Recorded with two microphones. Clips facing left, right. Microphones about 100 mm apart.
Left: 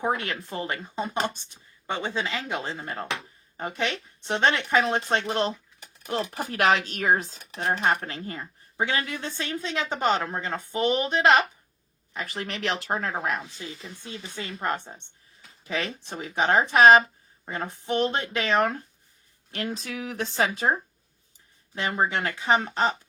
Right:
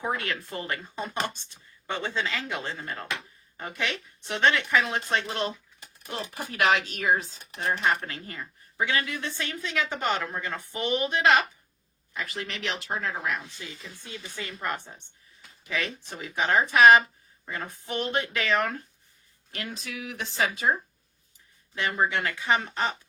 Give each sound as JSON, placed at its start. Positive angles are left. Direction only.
{"t": 0.0, "sound": "a woman's voice", "side_deg": 20}
{"t": 19.5, "sound": "speech", "side_deg": 40}
{"t": 21.8, "sound": "speech", "side_deg": 30}